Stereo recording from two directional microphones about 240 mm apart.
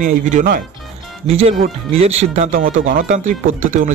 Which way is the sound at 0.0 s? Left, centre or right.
Right.